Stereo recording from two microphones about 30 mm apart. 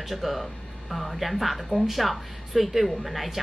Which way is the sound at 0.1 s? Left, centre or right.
Centre.